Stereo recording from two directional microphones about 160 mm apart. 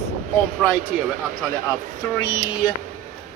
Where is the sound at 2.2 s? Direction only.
25° left (ahead or behind).